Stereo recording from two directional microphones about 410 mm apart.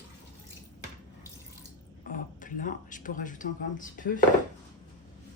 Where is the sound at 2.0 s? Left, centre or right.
Centre.